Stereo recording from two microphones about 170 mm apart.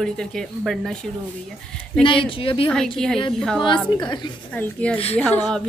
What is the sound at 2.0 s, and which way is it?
Speech, 30° left (ahead or behind).